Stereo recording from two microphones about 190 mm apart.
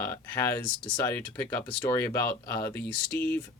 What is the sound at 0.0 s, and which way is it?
Speech, 15° left (ahead or behind).